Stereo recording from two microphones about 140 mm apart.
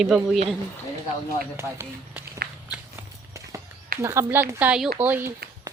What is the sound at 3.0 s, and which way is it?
Clip-clop, 20° right (ahead or behind).